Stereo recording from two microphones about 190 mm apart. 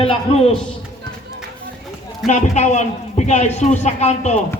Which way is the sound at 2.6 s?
40° left (ahead or behind).